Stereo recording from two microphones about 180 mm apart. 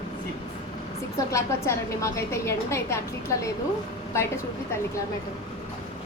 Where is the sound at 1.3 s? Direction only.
15° left (ahead or behind).